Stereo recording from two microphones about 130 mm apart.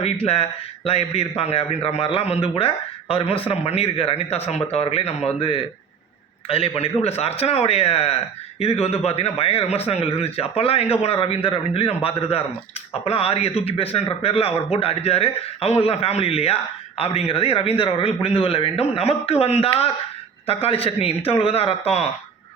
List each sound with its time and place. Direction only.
0.0 s a man's voice: 50° left (ahead or behind)
6.5 s a man's voice: 50° left (ahead or behind)
13.1 s a man's voice: 50° left (ahead or behind)